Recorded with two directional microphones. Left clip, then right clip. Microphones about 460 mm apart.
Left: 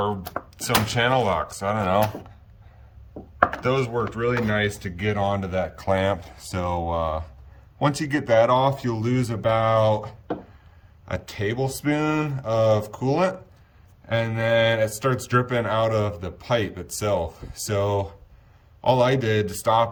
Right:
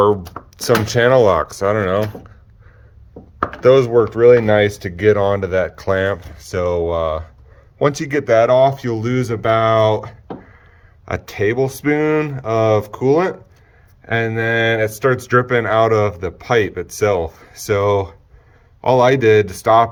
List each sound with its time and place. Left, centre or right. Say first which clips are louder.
0.5 s speech: right 8 dB; centre
3.6 s speech: right 13 dB; centre